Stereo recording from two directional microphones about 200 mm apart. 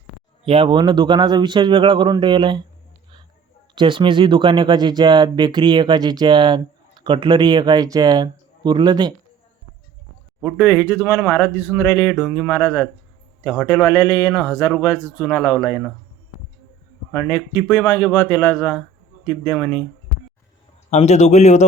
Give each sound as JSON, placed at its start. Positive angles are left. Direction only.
{"t": 0.4, "sound": "speech", "side_deg": -25}
{"t": 3.8, "sound": "speech", "side_deg": -25}
{"t": 10.4, "sound": "speech", "side_deg": 10}
{"t": 17.1, "sound": "speech", "side_deg": 10}
{"t": 20.9, "sound": "speech", "side_deg": 35}